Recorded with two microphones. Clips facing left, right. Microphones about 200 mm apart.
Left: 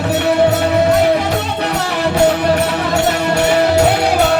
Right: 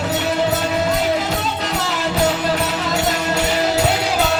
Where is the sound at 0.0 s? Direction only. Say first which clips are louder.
Left 6 dB; 60° left (ahead or behind).